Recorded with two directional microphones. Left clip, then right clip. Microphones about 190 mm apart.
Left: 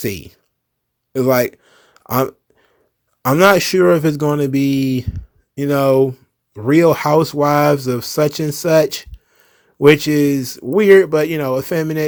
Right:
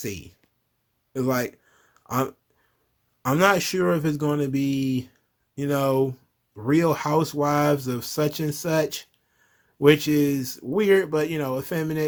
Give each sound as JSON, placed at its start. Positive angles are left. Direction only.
{"t": 0.0, "sound": "speech", "side_deg": 35}
{"t": 1.1, "sound": "a sound", "side_deg": 35}
{"t": 3.2, "sound": "speech", "side_deg": 35}